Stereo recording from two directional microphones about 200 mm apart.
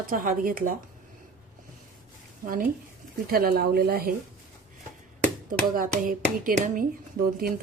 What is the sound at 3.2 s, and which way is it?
Speech, 45° right (ahead or behind).